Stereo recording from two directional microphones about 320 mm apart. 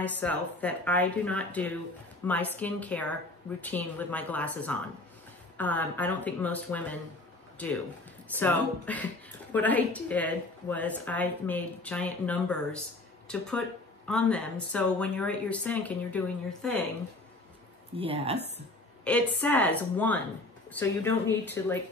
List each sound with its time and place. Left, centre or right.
0.0 s a woman's voice: centre
14.0 s a woman's voice: centre
17.9 s a woman's voice: centre
19.0 s a woman's voice: centre